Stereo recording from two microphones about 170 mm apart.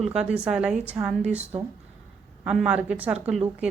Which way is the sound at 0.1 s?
5° right (ahead or behind).